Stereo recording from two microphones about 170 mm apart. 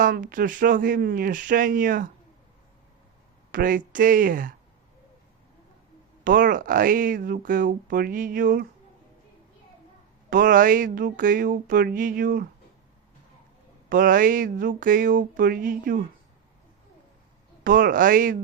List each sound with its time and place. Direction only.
0.0 s speech: 55° right (ahead or behind)
3.5 s speech: 55° right (ahead or behind)
6.2 s speech: 50° right (ahead or behind)
10.2 s speech: 55° right (ahead or behind)
13.9 s speech: 55° right (ahead or behind)
17.6 s speech: 55° right (ahead or behind)